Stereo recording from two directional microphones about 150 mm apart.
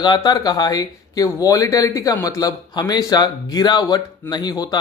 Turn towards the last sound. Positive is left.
turn(degrees=25)  # may be behind; listen again after turning